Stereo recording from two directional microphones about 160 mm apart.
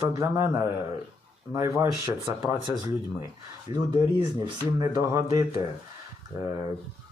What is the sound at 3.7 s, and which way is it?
Speech, 30° right (ahead or behind).